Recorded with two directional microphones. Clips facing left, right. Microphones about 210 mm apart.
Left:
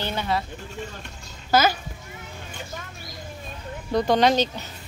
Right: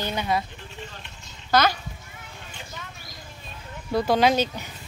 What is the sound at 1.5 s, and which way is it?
Speech, 5° left (ahead or behind).